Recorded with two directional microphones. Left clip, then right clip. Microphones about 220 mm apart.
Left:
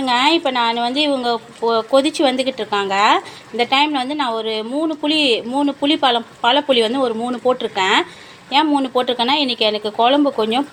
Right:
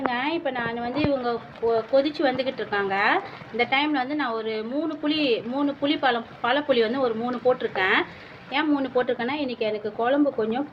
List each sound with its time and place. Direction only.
0.1 s a woman's voice: 35° left (ahead or behind)